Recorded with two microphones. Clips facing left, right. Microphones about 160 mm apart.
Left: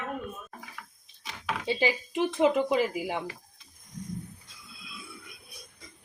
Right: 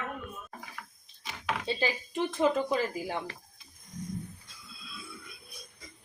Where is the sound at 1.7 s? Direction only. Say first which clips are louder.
Left 6 dB; 15° left (ahead or behind).